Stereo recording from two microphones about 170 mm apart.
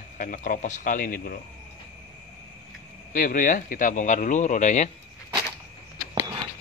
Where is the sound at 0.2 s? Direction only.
50° left (ahead or behind).